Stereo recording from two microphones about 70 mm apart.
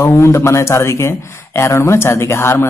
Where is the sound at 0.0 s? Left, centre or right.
Left.